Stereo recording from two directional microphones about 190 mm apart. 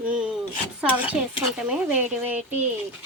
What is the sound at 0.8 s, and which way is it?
A woman's voice, 10° right (ahead or behind).